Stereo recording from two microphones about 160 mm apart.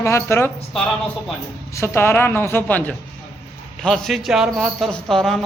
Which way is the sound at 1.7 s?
15° left (ahead or behind).